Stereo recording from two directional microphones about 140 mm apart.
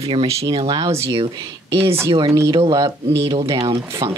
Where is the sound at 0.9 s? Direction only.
20° right (ahead or behind).